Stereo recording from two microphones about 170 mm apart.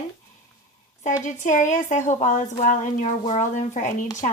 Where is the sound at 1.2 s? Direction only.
45° left (ahead or behind).